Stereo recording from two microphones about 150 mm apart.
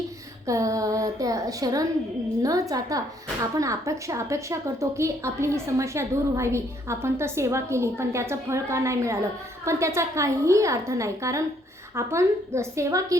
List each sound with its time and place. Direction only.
0.4 s a woman's voice: 20° right (ahead or behind)